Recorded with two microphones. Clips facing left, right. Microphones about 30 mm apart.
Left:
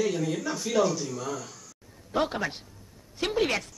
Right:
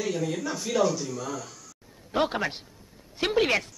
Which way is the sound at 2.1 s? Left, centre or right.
Centre.